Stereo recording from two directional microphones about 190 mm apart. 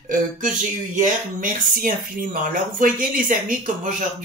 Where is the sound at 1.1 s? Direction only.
45° right (ahead or behind).